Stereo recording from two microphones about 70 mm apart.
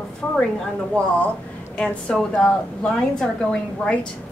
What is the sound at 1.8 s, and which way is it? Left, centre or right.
A woman's voice, centre.